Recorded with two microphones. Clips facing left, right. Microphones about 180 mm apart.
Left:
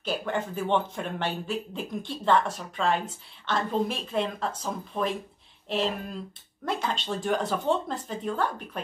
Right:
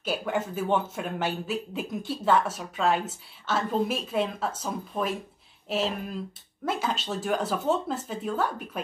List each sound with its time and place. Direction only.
0.0 s speech: 5° right (ahead or behind)